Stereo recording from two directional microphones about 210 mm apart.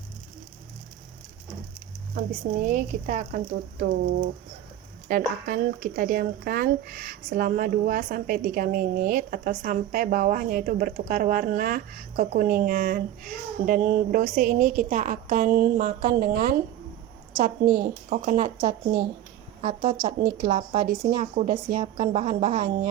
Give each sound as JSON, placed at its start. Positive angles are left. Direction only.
{"t": 2.6, "sound": "speech", "side_deg": -35}
{"t": 20.4, "sound": "speech", "side_deg": -30}